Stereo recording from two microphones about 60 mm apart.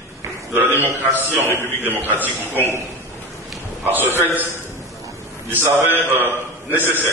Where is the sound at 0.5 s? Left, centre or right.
Right.